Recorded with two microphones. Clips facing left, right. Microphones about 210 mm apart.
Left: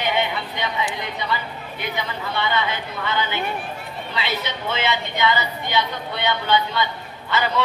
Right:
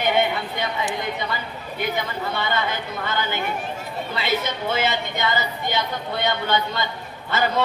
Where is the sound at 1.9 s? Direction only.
45° right (ahead or behind).